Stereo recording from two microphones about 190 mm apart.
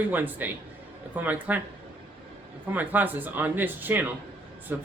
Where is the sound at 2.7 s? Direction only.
10° right (ahead or behind).